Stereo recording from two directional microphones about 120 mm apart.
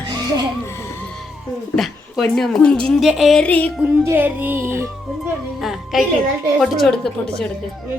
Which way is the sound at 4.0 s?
20° right (ahead or behind).